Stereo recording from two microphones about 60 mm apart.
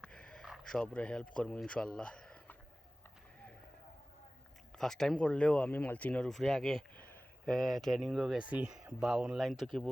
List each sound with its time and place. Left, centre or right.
0.0 s a sound: centre
0.7 s speech: centre
4.7 s speech: centre; by 6.2 s left
6.2 s speech: centre
6.9 s a sound: left
7.4 s speech: centre
8.4 s speech: right
9.4 s speech: centre